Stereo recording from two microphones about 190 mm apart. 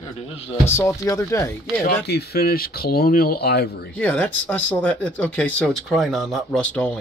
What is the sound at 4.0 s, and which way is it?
Speech, 10° left (ahead or behind).